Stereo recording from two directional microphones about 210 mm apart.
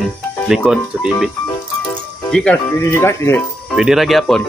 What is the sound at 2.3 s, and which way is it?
Speech, 5° left (ahead or behind).